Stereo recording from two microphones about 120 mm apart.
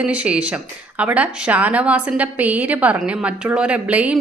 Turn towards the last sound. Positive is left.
turn(degrees=-10)  # may be behind; listen again after turning